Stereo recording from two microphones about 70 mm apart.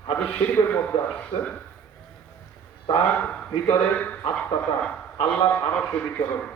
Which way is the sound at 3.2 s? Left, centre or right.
Left.